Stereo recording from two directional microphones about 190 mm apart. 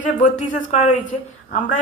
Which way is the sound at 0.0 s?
40° left (ahead or behind).